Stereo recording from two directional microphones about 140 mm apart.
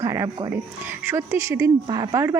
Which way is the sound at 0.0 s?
20° right (ahead or behind).